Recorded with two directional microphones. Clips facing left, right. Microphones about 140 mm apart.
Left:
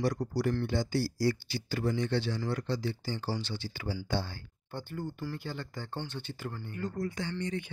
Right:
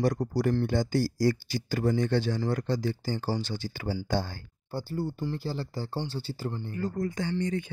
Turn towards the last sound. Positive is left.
turn(degrees=-45)  # may be behind; listen again after turning